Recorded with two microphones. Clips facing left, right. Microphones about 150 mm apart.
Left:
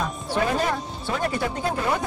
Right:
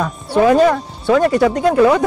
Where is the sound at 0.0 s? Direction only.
90° right.